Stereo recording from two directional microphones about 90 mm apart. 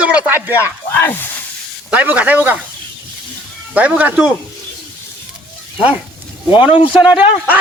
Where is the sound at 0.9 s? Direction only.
20° left (ahead or behind).